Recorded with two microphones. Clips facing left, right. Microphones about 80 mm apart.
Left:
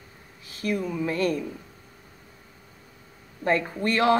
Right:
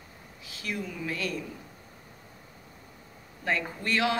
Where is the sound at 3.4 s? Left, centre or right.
Left.